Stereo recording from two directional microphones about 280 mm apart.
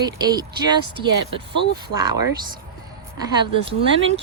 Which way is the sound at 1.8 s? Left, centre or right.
Centre.